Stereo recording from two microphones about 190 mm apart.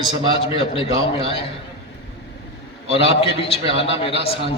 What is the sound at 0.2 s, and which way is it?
A man's voice, 30° left (ahead or behind).